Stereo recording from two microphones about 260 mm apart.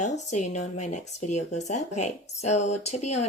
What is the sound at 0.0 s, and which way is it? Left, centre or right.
Speech, left.